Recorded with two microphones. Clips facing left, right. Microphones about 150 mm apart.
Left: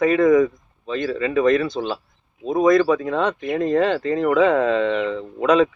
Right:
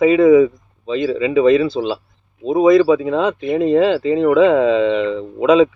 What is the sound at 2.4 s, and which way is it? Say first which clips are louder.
Speech: right 5 dB; 25° right (ahead or behind).